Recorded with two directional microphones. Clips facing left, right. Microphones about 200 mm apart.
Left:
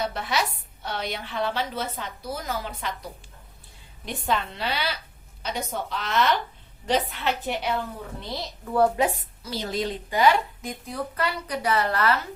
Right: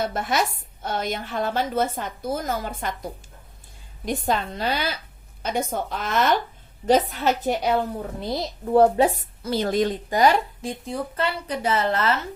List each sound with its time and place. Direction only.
0.0 s a woman's voice: 50° right (ahead or behind)
8.6 s a woman's voice: 30° right (ahead or behind)
9.1 s a woman's voice: 55° right (ahead or behind); by 12.2 s 25° right (ahead or behind)